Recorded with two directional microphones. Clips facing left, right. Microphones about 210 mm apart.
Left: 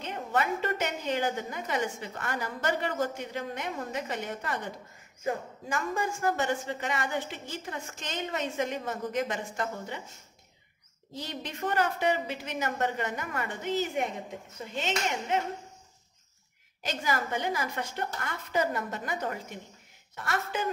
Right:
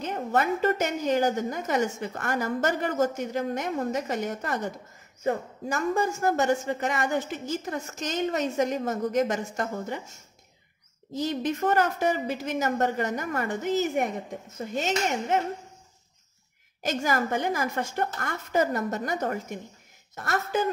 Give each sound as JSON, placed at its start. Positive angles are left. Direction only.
{"t": 0.0, "sound": "a woman's voice", "side_deg": -40}
{"t": 11.1, "sound": "a woman's voice", "side_deg": -45}
{"t": 14.6, "sound": "a woman's voice", "side_deg": -45}
{"t": 16.8, "sound": "a woman's voice", "side_deg": -45}